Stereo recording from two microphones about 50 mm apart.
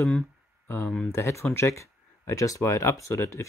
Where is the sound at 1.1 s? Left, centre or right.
Left.